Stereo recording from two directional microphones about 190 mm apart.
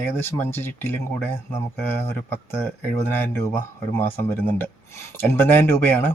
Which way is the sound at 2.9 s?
10° left (ahead or behind).